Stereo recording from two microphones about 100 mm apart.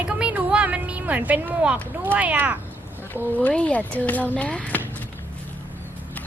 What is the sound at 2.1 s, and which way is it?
Speech, 15° right (ahead or behind).